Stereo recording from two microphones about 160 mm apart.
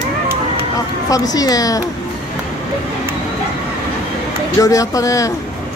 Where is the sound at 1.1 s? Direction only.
25° left (ahead or behind).